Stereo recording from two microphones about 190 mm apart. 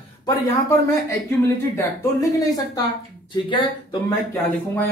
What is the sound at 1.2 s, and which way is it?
Speech, 15° left (ahead or behind).